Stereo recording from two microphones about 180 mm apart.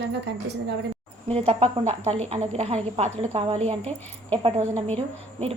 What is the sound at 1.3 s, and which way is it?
Speech, 35° right (ahead or behind).